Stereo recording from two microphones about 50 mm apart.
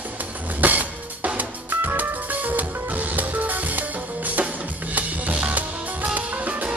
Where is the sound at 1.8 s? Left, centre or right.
Right.